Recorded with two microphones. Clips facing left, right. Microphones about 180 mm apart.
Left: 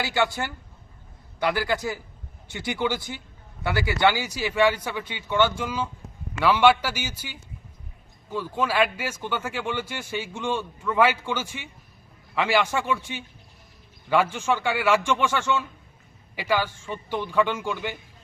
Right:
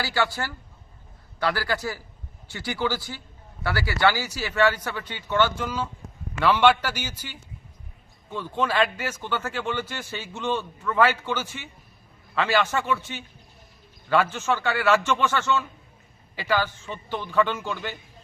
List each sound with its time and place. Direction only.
0.0 s speech: 20° left (ahead or behind)
8.5 s speech: 10° left (ahead or behind)